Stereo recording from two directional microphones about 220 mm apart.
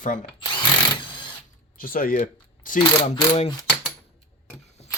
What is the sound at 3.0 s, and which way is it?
Mechanisms, 25° left (ahead or behind).